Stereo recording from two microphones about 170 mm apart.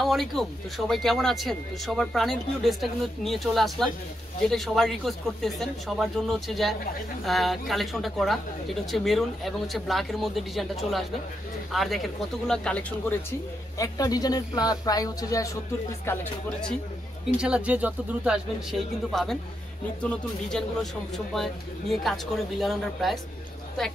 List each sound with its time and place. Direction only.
0.0 s a man's voice: centre (ahead or behind)
13.7 s speech: 20° left (ahead or behind)
17.4 s a man's voice: 5° right (ahead or behind)